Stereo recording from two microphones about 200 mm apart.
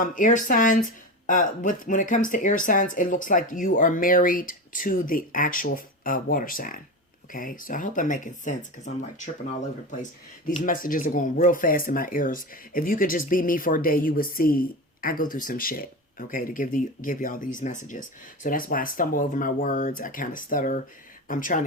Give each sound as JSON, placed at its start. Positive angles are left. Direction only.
{"t": 0.0, "sound": "speech", "side_deg": 40}
{"t": 10.5, "sound": "speech", "side_deg": 40}